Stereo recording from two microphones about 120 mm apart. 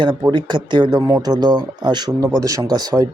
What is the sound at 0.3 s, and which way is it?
Speech, 40° right (ahead or behind).